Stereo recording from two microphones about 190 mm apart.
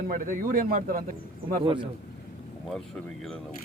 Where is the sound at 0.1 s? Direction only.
45° right (ahead or behind).